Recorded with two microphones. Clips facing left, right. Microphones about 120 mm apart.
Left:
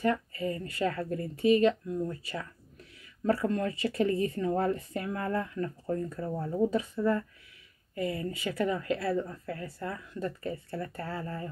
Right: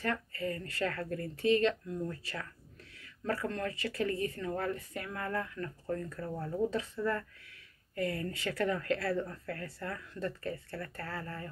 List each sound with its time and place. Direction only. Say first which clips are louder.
0.0 s speech: left 6 dB; 15° left (ahead or behind)